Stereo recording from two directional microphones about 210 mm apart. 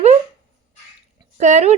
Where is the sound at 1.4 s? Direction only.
35° right (ahead or behind).